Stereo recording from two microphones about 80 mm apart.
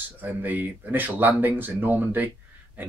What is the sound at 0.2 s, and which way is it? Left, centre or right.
Speech, right.